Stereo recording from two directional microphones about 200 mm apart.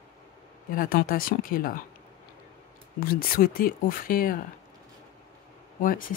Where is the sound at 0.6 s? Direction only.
45° left (ahead or behind).